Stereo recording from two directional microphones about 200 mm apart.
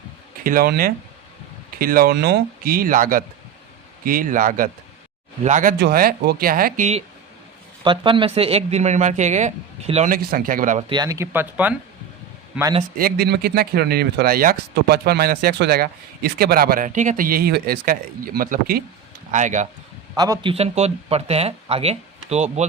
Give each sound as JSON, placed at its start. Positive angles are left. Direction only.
{"t": 0.4, "sound": "speech", "side_deg": -45}
{"t": 7.9, "sound": "speech", "side_deg": -25}
{"t": 10.2, "sound": "speech", "side_deg": -45}
{"t": 10.8, "sound": "a man's voice", "side_deg": -20}
{"t": 13.0, "sound": "speech", "side_deg": -50}
{"t": 20.1, "sound": "speech", "side_deg": -20}